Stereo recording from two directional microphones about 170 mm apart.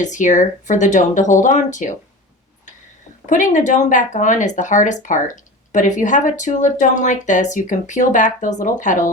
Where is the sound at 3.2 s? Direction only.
50° left (ahead or behind).